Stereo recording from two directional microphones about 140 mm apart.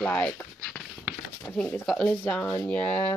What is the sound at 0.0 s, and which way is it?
Speech, 10° left (ahead or behind).